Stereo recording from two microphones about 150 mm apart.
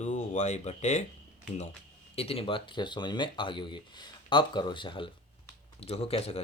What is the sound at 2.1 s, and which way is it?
Speech, 40° left (ahead or behind).